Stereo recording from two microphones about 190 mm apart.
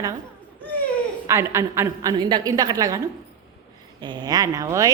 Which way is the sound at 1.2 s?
15° right (ahead or behind).